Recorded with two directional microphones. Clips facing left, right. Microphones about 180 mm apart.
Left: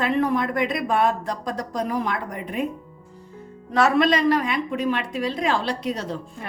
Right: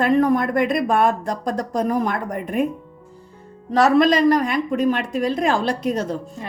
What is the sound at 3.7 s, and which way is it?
A woman's voice, 40° right (ahead or behind).